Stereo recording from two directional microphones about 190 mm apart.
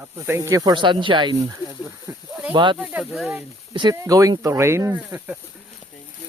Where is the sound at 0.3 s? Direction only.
15° right (ahead or behind).